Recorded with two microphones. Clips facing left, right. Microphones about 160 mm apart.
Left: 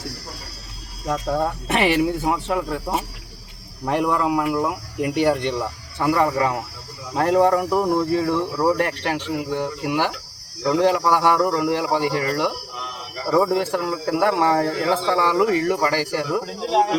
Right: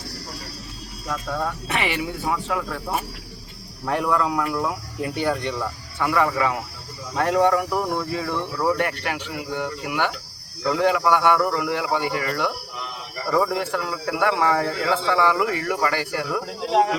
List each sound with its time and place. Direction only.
1.0 s speech: 35° left (ahead or behind)
2.5 s speech: 25° left (ahead or behind)
6.0 s speech: 35° left (ahead or behind)
16.3 s speech: 5° left (ahead or behind)